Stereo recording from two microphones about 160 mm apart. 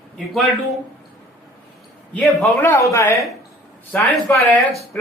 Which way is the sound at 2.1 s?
10° left (ahead or behind).